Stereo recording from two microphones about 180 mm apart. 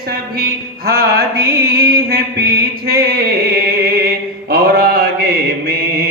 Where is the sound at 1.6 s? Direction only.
60° right (ahead or behind).